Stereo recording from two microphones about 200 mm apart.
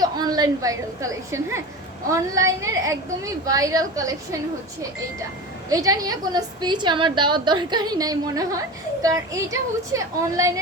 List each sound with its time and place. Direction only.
0.0 s a woman's voice: 20° right (ahead or behind)
5.6 s a woman's voice: 15° right (ahead or behind)